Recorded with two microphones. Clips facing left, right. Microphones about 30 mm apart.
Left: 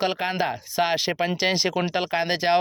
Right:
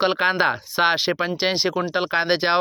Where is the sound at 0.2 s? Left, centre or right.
Right.